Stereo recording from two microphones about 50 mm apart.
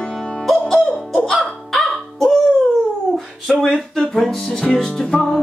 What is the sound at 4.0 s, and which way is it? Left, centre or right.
Music, centre.